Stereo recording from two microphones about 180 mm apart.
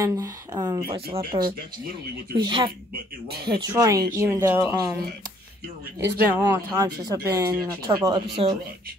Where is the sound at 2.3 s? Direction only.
25° right (ahead or behind).